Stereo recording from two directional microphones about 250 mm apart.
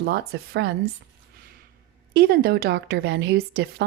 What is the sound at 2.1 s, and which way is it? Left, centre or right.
A woman's voice, right.